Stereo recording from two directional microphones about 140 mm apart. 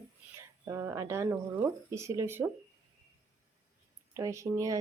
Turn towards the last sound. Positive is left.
turn(degrees=-20)  # may be behind; listen again after turning